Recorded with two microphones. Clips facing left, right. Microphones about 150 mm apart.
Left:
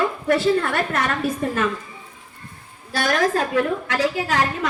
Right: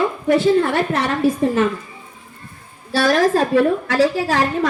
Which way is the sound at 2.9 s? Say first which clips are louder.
Right 5 dB; 30° right (ahead or behind).